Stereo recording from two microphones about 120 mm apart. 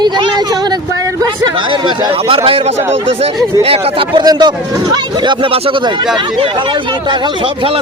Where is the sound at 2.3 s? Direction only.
50° right (ahead or behind).